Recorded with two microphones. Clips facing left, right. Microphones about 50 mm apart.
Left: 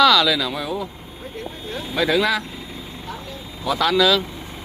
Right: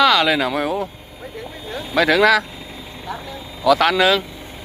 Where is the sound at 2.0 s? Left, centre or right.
Right.